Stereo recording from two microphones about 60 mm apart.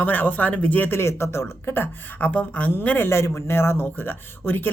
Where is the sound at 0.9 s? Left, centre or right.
Left.